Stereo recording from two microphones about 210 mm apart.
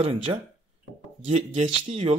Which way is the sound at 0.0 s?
25° right (ahead or behind).